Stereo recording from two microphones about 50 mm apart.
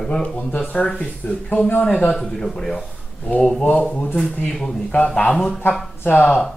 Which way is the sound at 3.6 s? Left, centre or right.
Left.